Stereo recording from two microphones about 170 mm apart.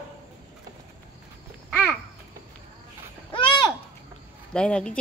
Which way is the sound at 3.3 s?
30° left (ahead or behind).